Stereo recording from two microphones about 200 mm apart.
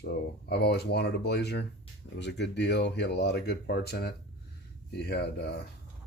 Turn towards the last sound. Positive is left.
turn(degrees=55)  # may be behind; listen again after turning